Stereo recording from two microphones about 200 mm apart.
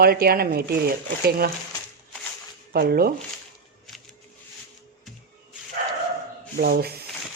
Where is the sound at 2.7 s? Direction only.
50° right (ahead or behind).